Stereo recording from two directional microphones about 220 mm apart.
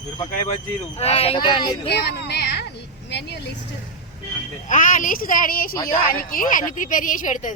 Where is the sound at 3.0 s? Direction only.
50° left (ahead or behind).